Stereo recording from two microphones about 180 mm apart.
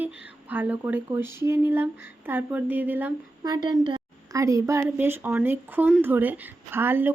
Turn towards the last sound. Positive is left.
turn(degrees=-10)  # may be behind; listen again after turning